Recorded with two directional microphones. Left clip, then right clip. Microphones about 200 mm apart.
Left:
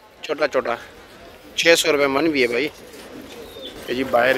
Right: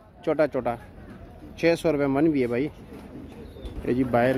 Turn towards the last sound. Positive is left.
turn(degrees=-10)  # may be behind; listen again after turning